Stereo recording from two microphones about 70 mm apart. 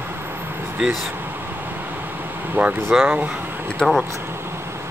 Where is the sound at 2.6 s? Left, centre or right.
Right.